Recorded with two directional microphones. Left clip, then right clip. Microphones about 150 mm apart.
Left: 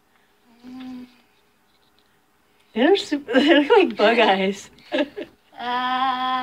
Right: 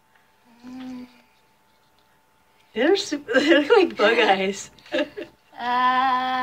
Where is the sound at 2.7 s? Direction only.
30° left (ahead or behind).